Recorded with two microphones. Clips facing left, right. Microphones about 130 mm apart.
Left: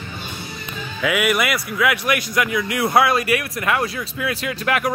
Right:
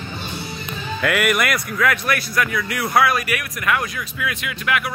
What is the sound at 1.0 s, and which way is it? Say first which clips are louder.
A man's voice: even; centre (ahead or behind).